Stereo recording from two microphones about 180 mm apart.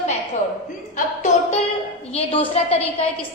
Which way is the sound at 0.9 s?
40° left (ahead or behind).